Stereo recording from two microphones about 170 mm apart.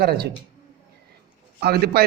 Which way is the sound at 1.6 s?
70° right (ahead or behind).